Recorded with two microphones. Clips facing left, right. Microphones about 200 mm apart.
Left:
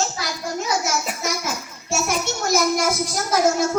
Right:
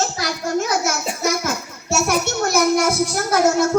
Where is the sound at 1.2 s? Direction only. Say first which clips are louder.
Right 5 dB; 55° right (ahead or behind).